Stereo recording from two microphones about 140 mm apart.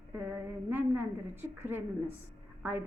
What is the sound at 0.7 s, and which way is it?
Speech, 15° right (ahead or behind).